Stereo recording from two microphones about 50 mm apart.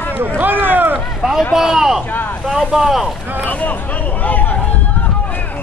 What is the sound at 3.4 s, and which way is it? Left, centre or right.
Speech, left.